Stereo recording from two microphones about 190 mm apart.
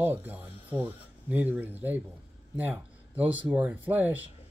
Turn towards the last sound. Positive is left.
turn(degrees=-10)  # may be behind; listen again after turning